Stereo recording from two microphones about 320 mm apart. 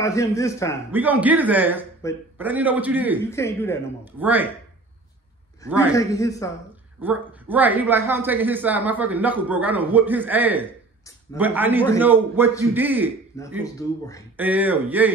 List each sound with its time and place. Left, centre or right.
0.0 s a man's voice: centre
0.9 s speech: centre
3.3 s a man's voice: centre
4.2 s speech: centre
5.7 s speech: centre
5.9 s a man's voice: centre
7.0 s speech: centre
13.4 s a man's voice: centre
14.3 s speech: centre